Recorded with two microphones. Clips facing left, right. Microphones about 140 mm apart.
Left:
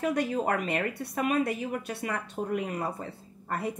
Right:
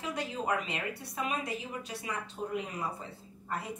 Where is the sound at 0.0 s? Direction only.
55° left (ahead or behind).